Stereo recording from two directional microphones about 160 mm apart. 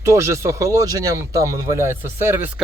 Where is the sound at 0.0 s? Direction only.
20° right (ahead or behind).